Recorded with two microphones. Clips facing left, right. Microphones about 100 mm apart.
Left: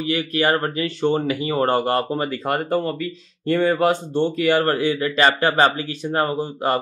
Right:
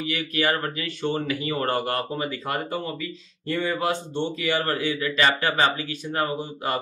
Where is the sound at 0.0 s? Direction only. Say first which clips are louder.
Left 5 dB; 35° left (ahead or behind).